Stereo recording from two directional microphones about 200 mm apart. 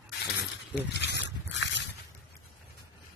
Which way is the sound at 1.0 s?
60° left (ahead or behind).